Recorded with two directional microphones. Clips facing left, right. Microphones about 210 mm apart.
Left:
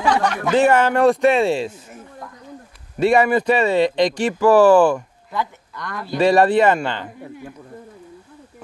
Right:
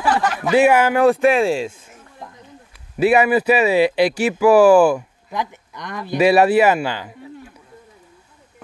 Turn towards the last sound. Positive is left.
turn(degrees=-5)  # may be behind; listen again after turning